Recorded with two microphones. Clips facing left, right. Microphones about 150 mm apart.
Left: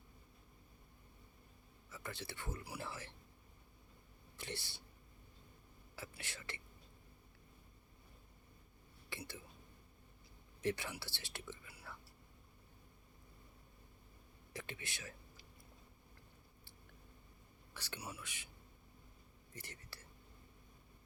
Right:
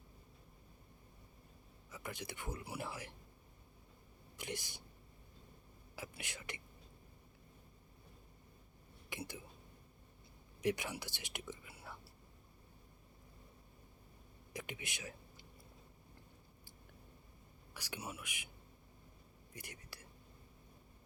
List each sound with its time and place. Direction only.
1.9 s speech: 15° right (ahead or behind)
4.4 s speech: 15° right (ahead or behind)
6.0 s speech: 15° right (ahead or behind)
9.0 s speech: 15° right (ahead or behind)
10.6 s speech: 15° right (ahead or behind)
11.7 s whispering: 25° right (ahead or behind)
14.5 s whispering: 15° right (ahead or behind)
17.7 s speech: 10° right (ahead or behind)
19.5 s speech: 15° right (ahead or behind)